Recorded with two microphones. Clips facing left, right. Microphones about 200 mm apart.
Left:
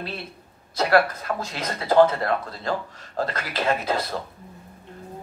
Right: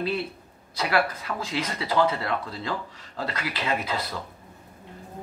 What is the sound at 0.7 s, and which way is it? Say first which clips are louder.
A man's voice: left 5 dB; 45° left (ahead or behind).